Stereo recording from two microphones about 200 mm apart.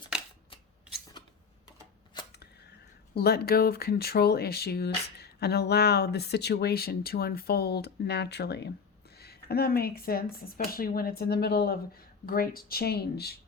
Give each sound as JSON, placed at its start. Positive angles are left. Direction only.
{"t": 0.1, "sound": "scissors", "side_deg": -5}
{"t": 3.2, "sound": "speech", "side_deg": 50}